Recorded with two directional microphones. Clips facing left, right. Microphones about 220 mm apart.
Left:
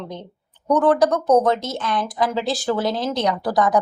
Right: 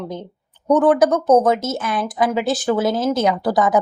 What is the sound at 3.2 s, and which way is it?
Speech, 25° right (ahead or behind).